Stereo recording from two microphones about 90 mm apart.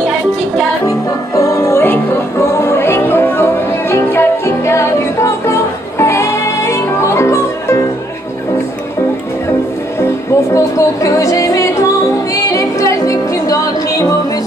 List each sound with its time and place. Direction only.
0.8 s music: 35° left (ahead or behind)
9.9 s music: 30° left (ahead or behind)